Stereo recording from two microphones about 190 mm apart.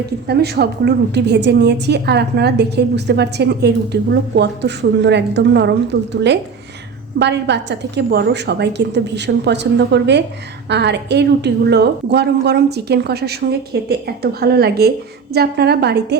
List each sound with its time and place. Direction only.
0.3 s a woman's voice: 60° right (ahead or behind)